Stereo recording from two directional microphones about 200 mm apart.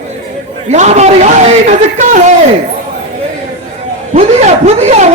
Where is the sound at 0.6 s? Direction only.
35° right (ahead or behind).